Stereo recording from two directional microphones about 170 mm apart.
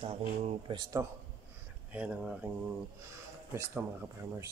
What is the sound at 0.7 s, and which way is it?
Speech, 20° right (ahead or behind).